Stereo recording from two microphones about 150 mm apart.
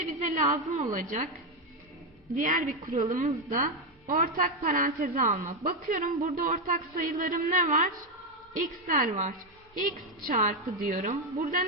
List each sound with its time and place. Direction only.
0.0 s a woman's voice: 55° right (ahead or behind)
2.3 s a woman's voice: 65° right (ahead or behind)